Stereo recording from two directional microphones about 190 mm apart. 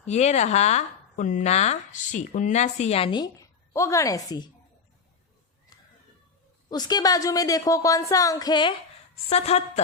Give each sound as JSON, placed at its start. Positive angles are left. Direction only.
{"t": 0.0, "sound": "speech", "side_deg": 35}
{"t": 6.7, "sound": "a woman's voice", "side_deg": 20}
{"t": 9.3, "sound": "speech", "side_deg": 35}